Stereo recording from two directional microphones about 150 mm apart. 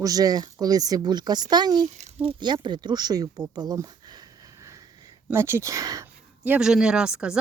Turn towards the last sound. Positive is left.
turn(degrees=-5)  # may be behind; listen again after turning